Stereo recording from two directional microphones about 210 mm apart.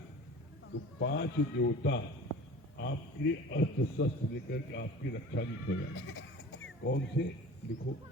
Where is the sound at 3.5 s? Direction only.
55° left (ahead or behind).